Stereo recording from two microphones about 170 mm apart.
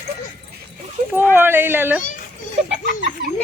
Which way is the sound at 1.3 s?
15° right (ahead or behind).